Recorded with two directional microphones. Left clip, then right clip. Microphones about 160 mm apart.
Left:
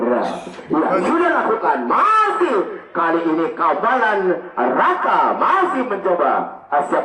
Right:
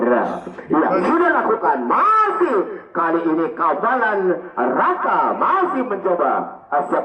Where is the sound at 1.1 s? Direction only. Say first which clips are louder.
Even; 25° right (ahead or behind).